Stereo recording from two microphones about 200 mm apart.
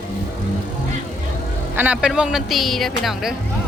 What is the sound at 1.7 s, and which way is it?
Speech, 5° right (ahead or behind).